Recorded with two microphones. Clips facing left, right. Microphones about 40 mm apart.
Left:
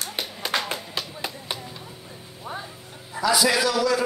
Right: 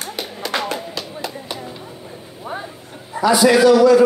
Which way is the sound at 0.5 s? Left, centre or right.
Centre.